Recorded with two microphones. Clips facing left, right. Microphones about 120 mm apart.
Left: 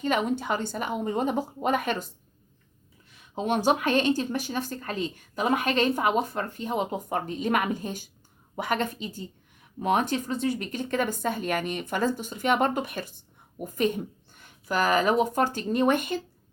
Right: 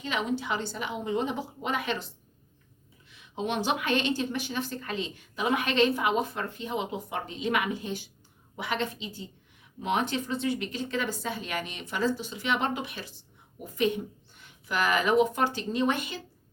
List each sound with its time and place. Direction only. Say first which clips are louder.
0.0 s a woman's voice: left 4 dB; 50° left (ahead or behind)